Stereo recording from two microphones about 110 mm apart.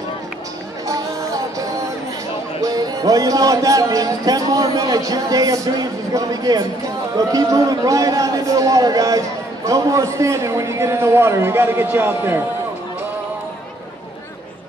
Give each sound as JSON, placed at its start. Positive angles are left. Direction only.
{"t": 2.6, "sound": "a man's voice", "side_deg": -35}